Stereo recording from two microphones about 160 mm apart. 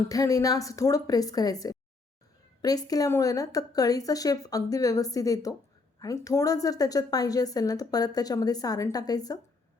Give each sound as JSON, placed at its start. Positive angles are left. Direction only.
{"t": 0.1, "sound": "a woman's voice", "side_deg": 20}